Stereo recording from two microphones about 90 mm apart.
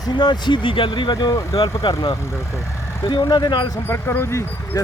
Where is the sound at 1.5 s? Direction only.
75° left (ahead or behind).